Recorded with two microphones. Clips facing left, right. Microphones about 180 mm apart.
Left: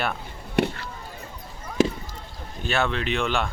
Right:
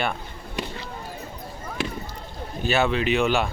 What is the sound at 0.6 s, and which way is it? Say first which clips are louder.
Chop: left 9 dB; 65° left (ahead or behind).